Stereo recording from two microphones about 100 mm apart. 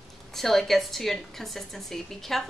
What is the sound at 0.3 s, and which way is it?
A woman's voice, 5° left (ahead or behind).